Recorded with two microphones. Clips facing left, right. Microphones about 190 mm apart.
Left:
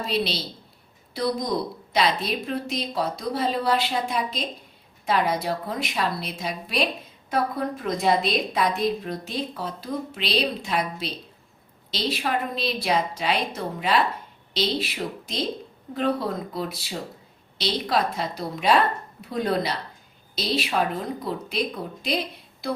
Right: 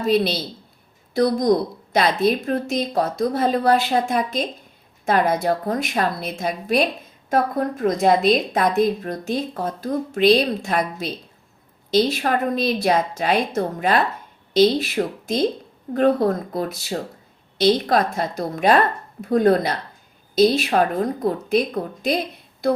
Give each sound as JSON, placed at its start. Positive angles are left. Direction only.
{"t": 0.0, "sound": "a woman's voice", "side_deg": -50}